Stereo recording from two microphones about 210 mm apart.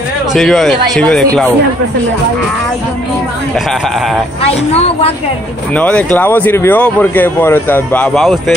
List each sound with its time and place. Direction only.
0.3 s speech: centre (ahead or behind)
4.4 s speech: 30° left (ahead or behind)
5.8 s speech: 5° left (ahead or behind)